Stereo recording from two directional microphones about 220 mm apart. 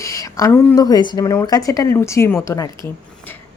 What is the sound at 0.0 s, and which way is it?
A woman's voice, 15° left (ahead or behind).